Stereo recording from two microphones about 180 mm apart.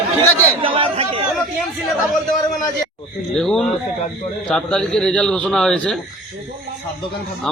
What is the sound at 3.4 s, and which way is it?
A man's voice, centre (ahead or behind).